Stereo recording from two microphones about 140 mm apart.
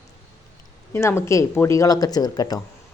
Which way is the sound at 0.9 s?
20° left (ahead or behind).